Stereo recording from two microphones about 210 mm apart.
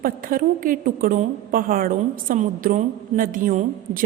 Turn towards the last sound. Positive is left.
turn(degrees=-40)  # may be behind; listen again after turning